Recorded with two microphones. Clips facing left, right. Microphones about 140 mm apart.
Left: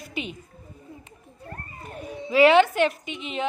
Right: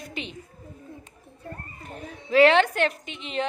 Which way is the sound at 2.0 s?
10° left (ahead or behind).